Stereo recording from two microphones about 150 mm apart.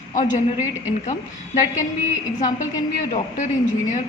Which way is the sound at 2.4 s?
55° left (ahead or behind).